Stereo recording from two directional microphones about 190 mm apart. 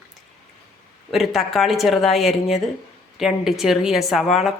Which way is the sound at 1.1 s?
Centre (ahead or behind).